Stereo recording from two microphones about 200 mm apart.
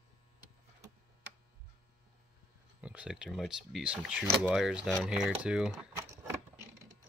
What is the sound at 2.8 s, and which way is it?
Speech, 5° right (ahead or behind).